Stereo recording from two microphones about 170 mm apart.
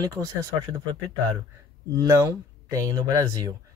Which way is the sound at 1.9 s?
20° right (ahead or behind).